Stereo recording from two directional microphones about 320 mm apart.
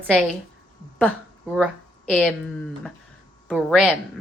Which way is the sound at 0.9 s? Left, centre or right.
Centre.